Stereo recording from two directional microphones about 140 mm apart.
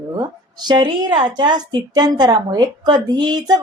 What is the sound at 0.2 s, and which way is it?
A woman's voice, 30° right (ahead or behind).